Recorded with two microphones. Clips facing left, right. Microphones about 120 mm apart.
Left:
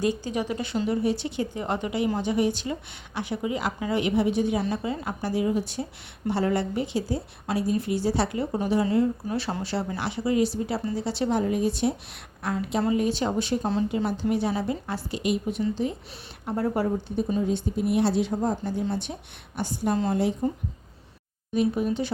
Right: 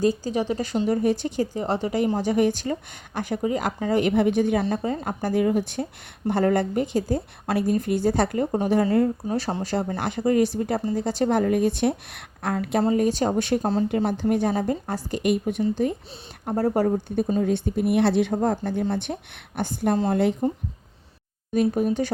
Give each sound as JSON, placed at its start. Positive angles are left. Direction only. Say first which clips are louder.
{"t": 0.0, "sound": "a woman's voice", "louder": "right 4 dB", "side_deg": -35}
{"t": 9.3, "sound": "a woman's voice", "louder": "right 3 dB", "side_deg": -40}
{"t": 12.8, "sound": "a woman's voice", "louder": "right 3 dB", "side_deg": -40}
{"t": 13.6, "sound": "speech", "louder": "right 3 dB", "side_deg": -40}
{"t": 13.8, "sound": "a woman's voice", "louder": "right 3 dB", "side_deg": -55}
{"t": 16.5, "sound": "speech", "louder": "right 4 dB", "side_deg": -40}
{"t": 17.4, "sound": "a woman's voice", "louder": "right 3 dB", "side_deg": -60}
{"t": 21.5, "sound": "a woman's voice", "louder": "right 3 dB", "side_deg": -45}